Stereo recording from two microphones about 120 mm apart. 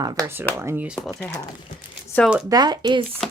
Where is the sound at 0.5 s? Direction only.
20° right (ahead or behind).